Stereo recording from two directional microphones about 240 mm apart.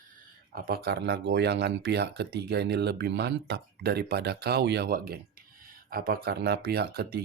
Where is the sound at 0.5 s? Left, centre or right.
Right.